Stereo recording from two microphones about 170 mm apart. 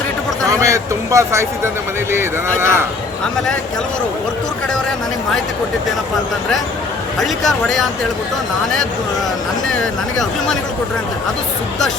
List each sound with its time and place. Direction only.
0.4 s speech: 20° right (ahead or behind)
7.2 s speech: centre (ahead or behind)